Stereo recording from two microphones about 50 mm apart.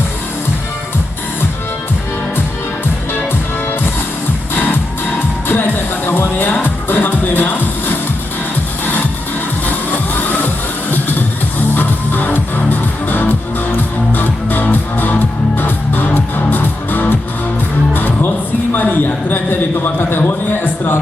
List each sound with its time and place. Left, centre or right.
4.5 s music: left
11.8 s music: left
18.7 s a man's voice: left